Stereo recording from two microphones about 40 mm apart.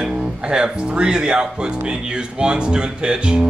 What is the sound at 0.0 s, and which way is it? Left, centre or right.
Speech, centre.